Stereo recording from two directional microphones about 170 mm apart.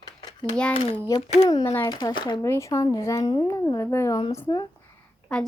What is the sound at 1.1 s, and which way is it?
Speech, 20° left (ahead or behind).